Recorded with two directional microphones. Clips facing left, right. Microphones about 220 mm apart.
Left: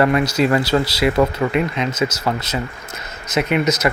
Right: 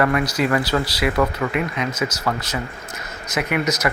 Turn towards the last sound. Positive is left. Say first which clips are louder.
# left 4 dB
turn(degrees=20)  # may be behind; listen again after turning